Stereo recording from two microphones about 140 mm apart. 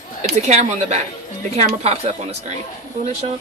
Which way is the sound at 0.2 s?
55° right (ahead or behind).